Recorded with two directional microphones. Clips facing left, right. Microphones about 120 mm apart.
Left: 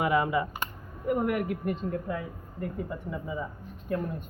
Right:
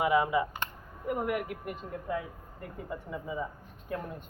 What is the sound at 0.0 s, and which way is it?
Speech, 15° right (ahead or behind).